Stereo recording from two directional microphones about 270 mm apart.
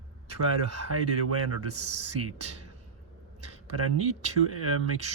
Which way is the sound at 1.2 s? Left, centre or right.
Right.